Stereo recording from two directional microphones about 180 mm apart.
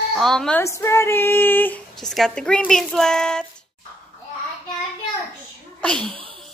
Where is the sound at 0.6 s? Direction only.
15° left (ahead or behind).